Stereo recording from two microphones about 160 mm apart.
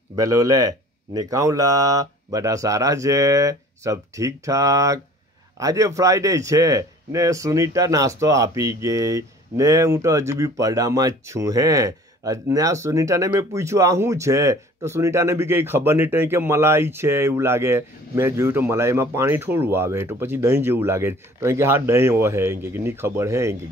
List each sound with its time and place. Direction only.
0.1 s a man's voice: 20° right (ahead or behind)